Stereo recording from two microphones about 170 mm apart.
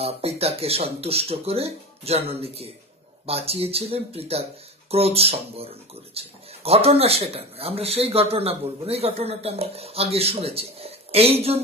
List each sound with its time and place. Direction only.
0.0 s speech: 35° right (ahead or behind)